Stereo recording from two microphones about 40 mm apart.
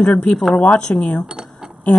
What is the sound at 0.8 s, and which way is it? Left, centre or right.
Speech, centre.